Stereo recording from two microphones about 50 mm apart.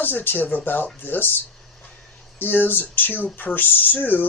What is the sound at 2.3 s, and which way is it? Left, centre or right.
Speech, left.